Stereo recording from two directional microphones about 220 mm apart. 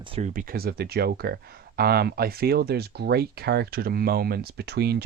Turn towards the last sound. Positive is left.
turn(degrees=-45)  # may be behind; listen again after turning